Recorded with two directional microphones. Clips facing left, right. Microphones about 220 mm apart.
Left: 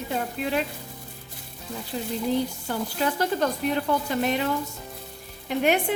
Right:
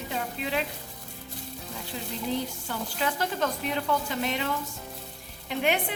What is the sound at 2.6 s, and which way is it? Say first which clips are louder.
Sizzle: left 4 dB; 40° left (ahead or behind).